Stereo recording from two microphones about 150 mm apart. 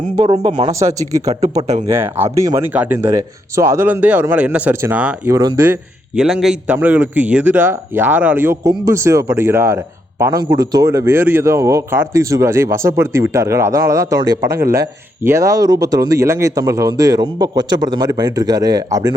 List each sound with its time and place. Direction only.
0.6 s a man's voice: 20° right (ahead or behind)
5.3 s a man's voice: 25° right (ahead or behind)
5.6 s a man's voice: 15° right (ahead or behind)
6.2 s a man's voice: centre (ahead or behind); by 19.1 s 25° right (ahead or behind)